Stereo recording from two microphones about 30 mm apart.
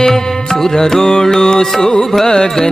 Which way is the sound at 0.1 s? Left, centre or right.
Centre.